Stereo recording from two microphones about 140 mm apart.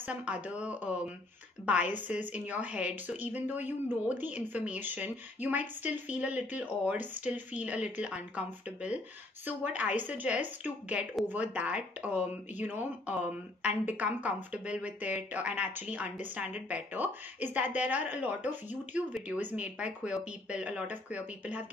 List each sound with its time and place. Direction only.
0.0 s speech: 10° right (ahead or behind)